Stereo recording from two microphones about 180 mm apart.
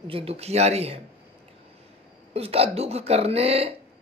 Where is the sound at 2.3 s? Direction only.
35° right (ahead or behind).